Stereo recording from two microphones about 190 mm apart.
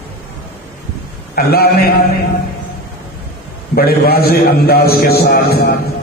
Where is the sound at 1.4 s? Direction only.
55° left (ahead or behind).